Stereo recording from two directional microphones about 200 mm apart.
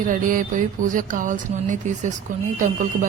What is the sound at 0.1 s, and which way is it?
Speech, 40° right (ahead or behind).